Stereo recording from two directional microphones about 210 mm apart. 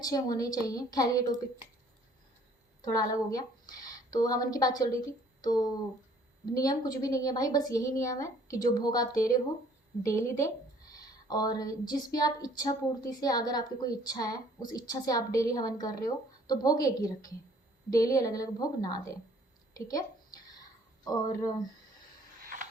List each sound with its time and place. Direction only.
0.0 s a woman's voice: 20° left (ahead or behind)
2.8 s a woman's voice: 15° left (ahead or behind)
19.7 s a sound: 15° left (ahead or behind)